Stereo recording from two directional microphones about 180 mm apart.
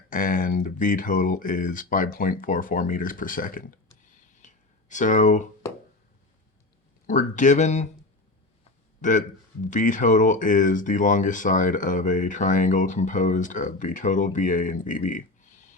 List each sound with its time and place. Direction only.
0.1 s speech: 50° left (ahead or behind)
7.1 s speech: 45° left (ahead or behind)
9.0 s speech: 45° left (ahead or behind)